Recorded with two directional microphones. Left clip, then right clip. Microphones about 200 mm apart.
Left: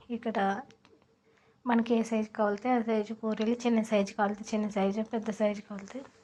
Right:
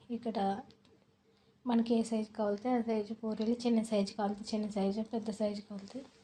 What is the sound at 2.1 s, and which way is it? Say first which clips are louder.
Speech: left 5 dB; 30° left (ahead or behind).